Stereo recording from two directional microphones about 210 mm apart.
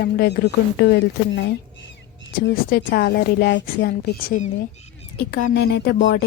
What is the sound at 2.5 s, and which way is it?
A woman's voice, 45° left (ahead or behind).